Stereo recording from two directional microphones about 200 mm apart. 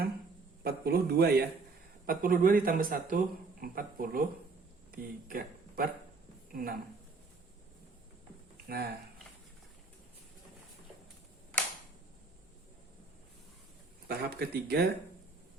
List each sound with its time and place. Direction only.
0.6 s a man's voice: 50° right (ahead or behind)
8.6 s speech: 50° right (ahead or behind)
14.1 s a man's voice: 50° right (ahead or behind)